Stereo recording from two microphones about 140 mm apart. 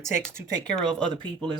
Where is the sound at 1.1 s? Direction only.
35° right (ahead or behind).